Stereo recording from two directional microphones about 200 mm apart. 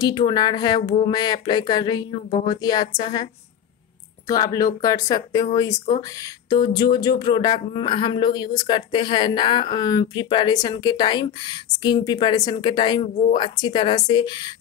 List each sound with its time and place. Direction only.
0.0 s speech: 20° left (ahead or behind)
4.3 s speech: 15° left (ahead or behind)